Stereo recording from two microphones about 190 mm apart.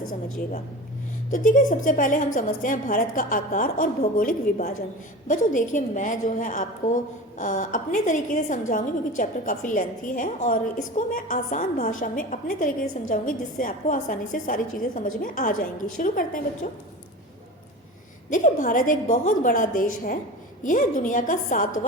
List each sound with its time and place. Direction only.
0.1 s a woman's voice: 45° left (ahead or behind)
18.3 s a woman's voice: 45° left (ahead or behind)